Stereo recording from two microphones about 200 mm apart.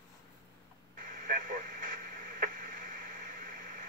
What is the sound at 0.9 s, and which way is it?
Radio, 45° right (ahead or behind).